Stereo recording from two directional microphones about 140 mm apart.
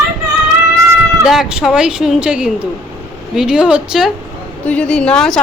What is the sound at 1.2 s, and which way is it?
Speech, centre (ahead or behind).